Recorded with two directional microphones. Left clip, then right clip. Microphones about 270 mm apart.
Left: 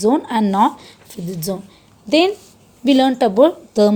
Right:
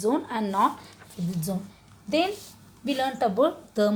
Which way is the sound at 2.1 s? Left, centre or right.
Left.